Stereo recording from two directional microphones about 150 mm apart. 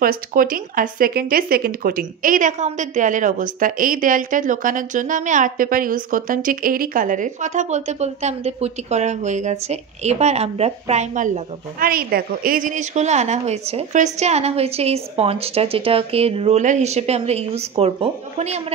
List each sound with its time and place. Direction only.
0.0 s speech: 75° right (ahead or behind); by 17.9 s 40° right (ahead or behind)